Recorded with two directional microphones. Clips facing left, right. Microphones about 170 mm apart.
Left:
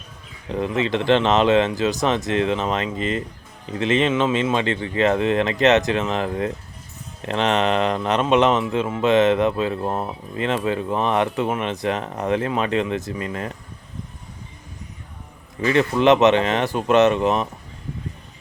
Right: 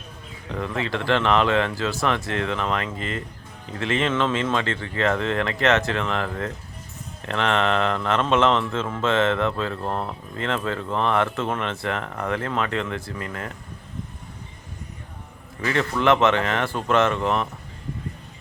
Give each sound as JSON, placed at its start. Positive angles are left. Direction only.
{"t": 0.4, "sound": "speech", "side_deg": 20}
{"t": 15.6, "sound": "speech", "side_deg": 20}